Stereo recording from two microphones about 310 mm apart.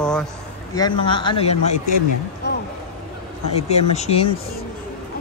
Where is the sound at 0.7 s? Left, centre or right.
Centre.